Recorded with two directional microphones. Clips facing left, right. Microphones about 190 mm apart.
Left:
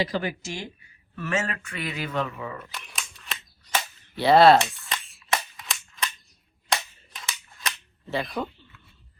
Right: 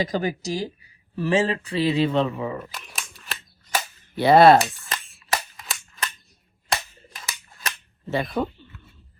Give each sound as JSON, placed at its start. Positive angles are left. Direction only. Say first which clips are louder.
{"t": 0.0, "sound": "speech", "louder": "right 3 dB", "side_deg": -40}
{"t": 2.7, "sound": "cap gun", "louder": "right 1 dB", "side_deg": 0}
{"t": 4.1, "sound": "speech", "louder": "right 2 dB", "side_deg": -20}
{"t": 4.4, "sound": "cap gun", "louder": "right 2 dB", "side_deg": 0}
{"t": 8.1, "sound": "speech", "louder": "right 4 dB", "side_deg": -25}